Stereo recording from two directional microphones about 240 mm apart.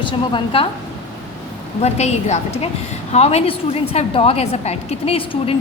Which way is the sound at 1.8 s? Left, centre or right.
Left.